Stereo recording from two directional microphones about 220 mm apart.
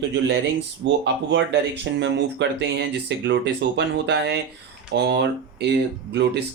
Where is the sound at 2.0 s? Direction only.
55° right (ahead or behind).